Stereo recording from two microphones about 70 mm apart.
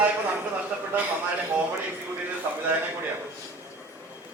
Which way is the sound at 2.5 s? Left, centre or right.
Right.